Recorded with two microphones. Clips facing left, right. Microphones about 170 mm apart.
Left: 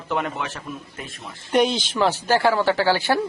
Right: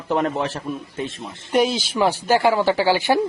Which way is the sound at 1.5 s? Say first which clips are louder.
Even; centre (ahead or behind).